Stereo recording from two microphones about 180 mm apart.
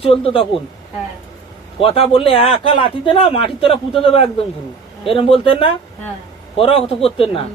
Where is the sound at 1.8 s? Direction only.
30° left (ahead or behind).